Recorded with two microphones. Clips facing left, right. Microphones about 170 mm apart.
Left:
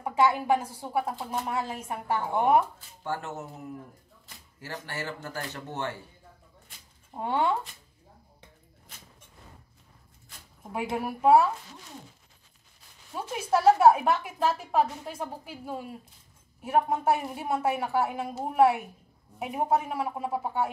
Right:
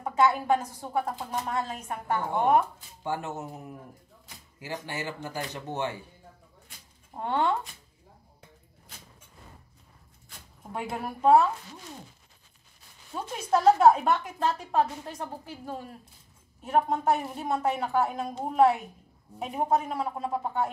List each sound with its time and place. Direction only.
0.0 s a woman's voice: 15° left (ahead or behind)
3.0 s speech: 15° right (ahead or behind)
4.6 s speech: 15° right (ahead or behind)
7.2 s a woman's voice: 10° left (ahead or behind)
10.7 s a woman's voice: 10° left (ahead or behind)
13.1 s a woman's voice: 10° left (ahead or behind)